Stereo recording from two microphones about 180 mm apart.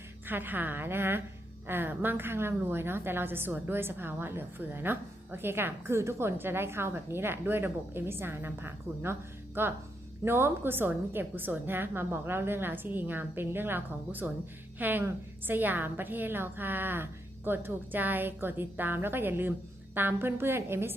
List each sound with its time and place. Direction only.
0.3 s a woman's voice: 10° right (ahead or behind)